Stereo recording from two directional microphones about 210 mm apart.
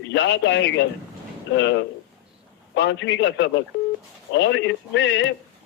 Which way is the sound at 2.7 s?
60° left (ahead or behind).